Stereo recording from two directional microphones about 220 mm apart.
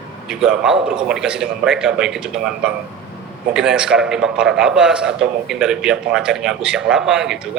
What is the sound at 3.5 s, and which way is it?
A man's voice, 5° right (ahead or behind).